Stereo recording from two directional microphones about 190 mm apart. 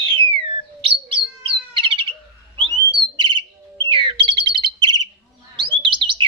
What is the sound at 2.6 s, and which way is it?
Bird, 25° right (ahead or behind).